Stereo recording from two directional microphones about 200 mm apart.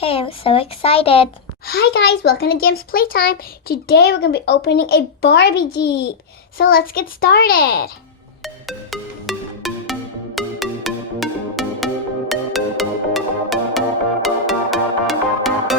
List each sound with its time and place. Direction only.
0.0 s speech: 30° left (ahead or behind)
1.6 s a child's voice: 50° left (ahead or behind)
8.6 s music: centre (ahead or behind)